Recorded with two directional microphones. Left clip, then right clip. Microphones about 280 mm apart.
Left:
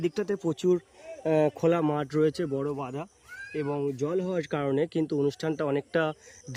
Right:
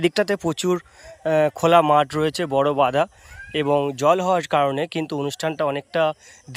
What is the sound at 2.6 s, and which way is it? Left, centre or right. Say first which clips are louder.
Speech: right 15 dB; right.